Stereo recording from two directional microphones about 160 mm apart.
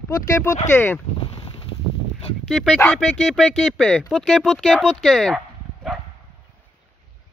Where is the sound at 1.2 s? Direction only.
35° left (ahead or behind).